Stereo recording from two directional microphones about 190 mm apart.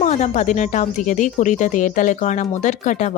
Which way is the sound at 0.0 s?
35° left (ahead or behind).